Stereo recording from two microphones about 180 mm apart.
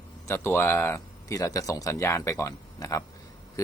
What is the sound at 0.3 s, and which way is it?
Speech, 15° left (ahead or behind).